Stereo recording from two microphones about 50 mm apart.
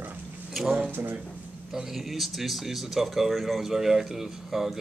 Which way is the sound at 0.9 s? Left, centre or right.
Right.